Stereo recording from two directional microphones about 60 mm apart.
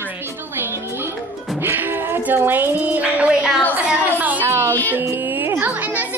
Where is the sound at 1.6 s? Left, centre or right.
Right; by 3.5 s centre.